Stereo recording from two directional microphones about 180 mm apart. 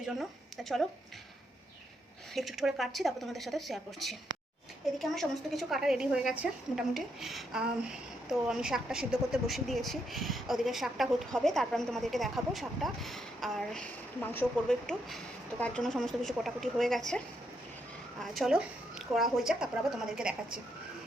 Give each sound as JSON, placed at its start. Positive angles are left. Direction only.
{"t": 0.0, "sound": "speech", "side_deg": 0}
{"t": 2.3, "sound": "a woman's voice", "side_deg": 0}
{"t": 18.2, "sound": "a woman's voice", "side_deg": 0}